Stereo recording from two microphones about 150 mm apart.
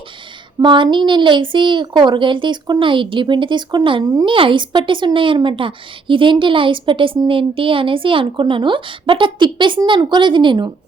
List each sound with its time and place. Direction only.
0.6 s speech: 30° right (ahead or behind)